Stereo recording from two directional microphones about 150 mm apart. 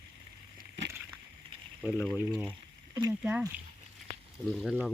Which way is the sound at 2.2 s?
10° right (ahead or behind).